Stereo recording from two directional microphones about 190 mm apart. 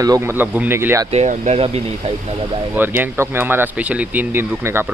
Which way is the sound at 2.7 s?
10° right (ahead or behind).